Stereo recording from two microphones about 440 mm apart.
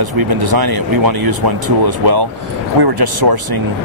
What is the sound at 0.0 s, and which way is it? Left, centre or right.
Speech, right.